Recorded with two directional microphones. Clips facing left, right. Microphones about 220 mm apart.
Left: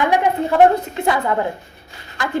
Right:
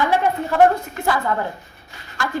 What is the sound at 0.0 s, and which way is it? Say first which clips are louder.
A woman's voice: left 2 dB; 15° left (ahead or behind).